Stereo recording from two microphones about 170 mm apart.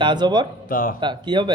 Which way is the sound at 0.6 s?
55° left (ahead or behind).